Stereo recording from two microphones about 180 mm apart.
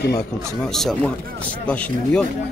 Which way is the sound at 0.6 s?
Centre (ahead or behind).